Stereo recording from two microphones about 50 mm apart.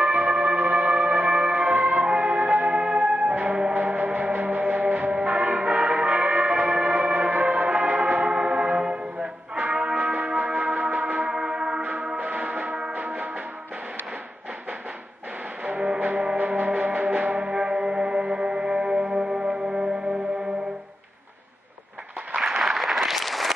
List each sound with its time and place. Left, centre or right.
0.0 s music: right
11.3 s church bell: centre
11.8 s music: right
15.6 s music: right
22.4 s applause: centre